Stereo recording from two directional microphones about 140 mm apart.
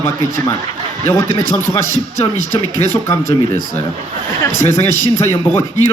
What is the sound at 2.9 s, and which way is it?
Speech, 15° left (ahead or behind).